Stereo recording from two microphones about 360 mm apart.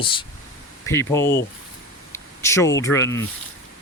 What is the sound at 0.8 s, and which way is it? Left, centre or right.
Speech, centre.